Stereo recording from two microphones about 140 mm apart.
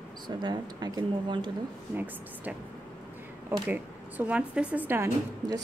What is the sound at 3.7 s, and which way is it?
Speech, 10° right (ahead or behind).